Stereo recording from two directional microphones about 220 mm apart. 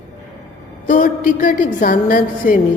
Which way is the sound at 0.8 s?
35° left (ahead or behind).